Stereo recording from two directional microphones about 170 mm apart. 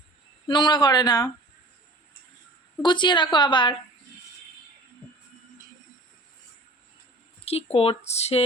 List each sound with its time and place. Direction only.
0.4 s a woman's voice: 25° left (ahead or behind)
2.8 s a woman's voice: 25° left (ahead or behind)
7.4 s speech: 35° left (ahead or behind)